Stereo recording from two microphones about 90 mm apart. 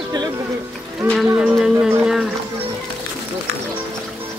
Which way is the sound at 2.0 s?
5° right (ahead or behind).